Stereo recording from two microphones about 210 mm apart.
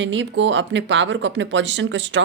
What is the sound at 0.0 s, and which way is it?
Speech, 60° right (ahead or behind).